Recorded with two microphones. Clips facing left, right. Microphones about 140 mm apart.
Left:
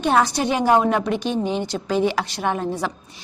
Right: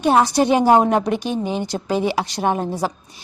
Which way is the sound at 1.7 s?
30° right (ahead or behind).